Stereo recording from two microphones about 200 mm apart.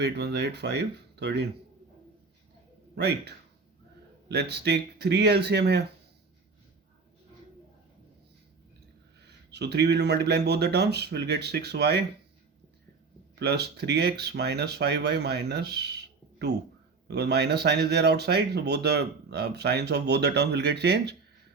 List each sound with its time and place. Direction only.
0.0 s speech: 55° right (ahead or behind)
2.9 s speech: 55° right (ahead or behind)
9.2 s speech: 55° right (ahead or behind)
13.4 s speech: 55° right (ahead or behind)